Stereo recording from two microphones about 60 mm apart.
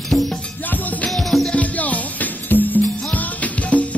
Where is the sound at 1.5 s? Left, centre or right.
Left.